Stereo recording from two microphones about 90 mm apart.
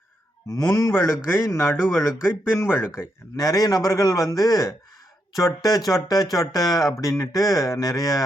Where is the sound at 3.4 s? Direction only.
45° left (ahead or behind).